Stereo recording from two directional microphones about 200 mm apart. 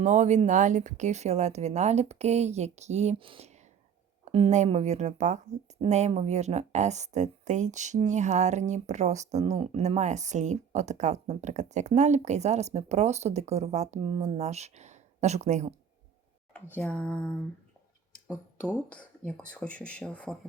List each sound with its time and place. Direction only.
0.0 s speech: 35° right (ahead or behind)
16.7 s speech: 5° left (ahead or behind)
18.9 s speech: 5° left (ahead or behind)